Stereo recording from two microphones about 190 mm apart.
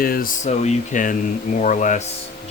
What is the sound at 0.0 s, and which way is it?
Speech, 50° left (ahead or behind).